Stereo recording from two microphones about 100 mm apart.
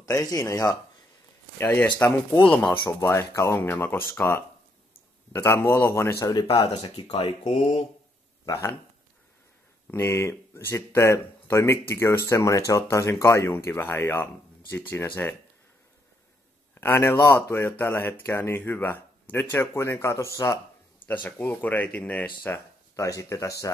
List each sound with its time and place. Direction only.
0.0 s speech: 40° left (ahead or behind)
1.6 s speech: 15° left (ahead or behind)
2.9 s speech: 25° left (ahead or behind)
6.2 s speech: 35° left (ahead or behind)
7.1 s speech: 85° left
9.8 s speech: 25° left (ahead or behind)
16.8 s speech: 25° left (ahead or behind)
21.1 s speech: 15° left (ahead or behind)
23.0 s speech: 35° left (ahead or behind)